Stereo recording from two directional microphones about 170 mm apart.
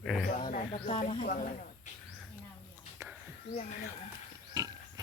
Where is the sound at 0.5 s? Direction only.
45° left (ahead or behind).